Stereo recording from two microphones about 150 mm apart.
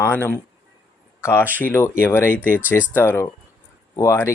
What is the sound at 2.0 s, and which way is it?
Speech, 15° left (ahead or behind).